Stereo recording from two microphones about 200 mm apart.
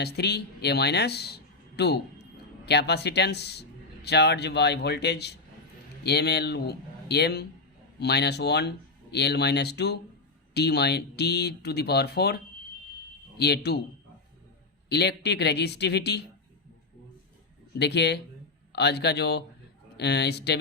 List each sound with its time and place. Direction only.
0.0 s speech: 55° left (ahead or behind)
14.8 s speech: 55° left (ahead or behind)
17.7 s speech: 55° left (ahead or behind)